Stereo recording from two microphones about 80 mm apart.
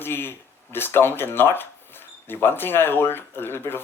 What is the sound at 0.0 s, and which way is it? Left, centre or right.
Speech, left.